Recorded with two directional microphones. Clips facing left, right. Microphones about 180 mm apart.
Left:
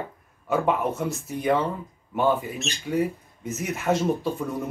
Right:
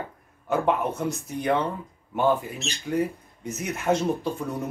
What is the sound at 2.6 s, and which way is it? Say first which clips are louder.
Speech: even; centre (ahead or behind).